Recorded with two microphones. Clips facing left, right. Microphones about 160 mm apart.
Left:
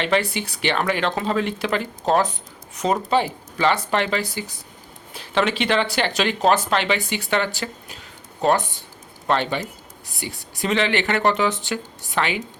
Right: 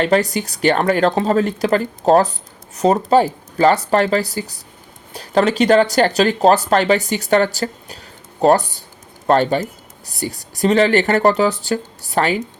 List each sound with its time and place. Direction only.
0.0 s speech: 40° right (ahead or behind)